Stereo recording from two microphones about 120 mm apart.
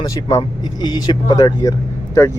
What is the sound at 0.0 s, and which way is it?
Speech, 30° left (ahead or behind).